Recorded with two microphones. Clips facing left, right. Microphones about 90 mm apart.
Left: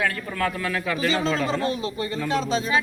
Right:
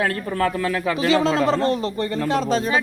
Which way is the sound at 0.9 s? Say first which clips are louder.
Right 6 dB; 80° right.